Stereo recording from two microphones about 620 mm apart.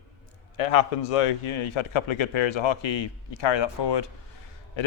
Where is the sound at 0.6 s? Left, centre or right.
Left.